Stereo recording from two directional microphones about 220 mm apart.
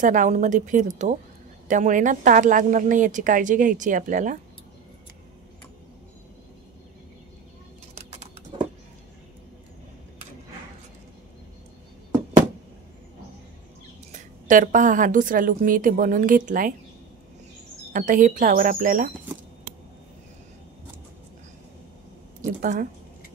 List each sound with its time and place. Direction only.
0.0 s speech: 35° right (ahead or behind)
7.9 s a sound: 30° right (ahead or behind)
14.1 s speech: 35° right (ahead or behind)
17.9 s speech: 35° right (ahead or behind)
22.4 s speech: 35° right (ahead or behind)